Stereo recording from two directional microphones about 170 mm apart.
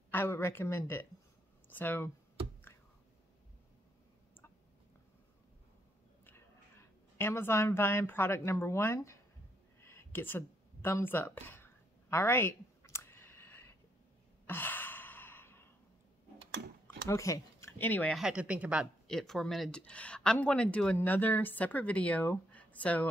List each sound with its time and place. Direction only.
0.1 s speech: 15° left (ahead or behind)
7.2 s speech: 15° left (ahead or behind)
9.8 s a sound: 15° left (ahead or behind)
14.4 s sigh: 10° left (ahead or behind)
16.8 s a sound: 20° left (ahead or behind)
18.1 s speech: 5° right (ahead or behind)